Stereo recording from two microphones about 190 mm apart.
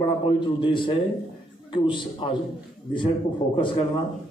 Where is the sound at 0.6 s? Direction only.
25° left (ahead or behind).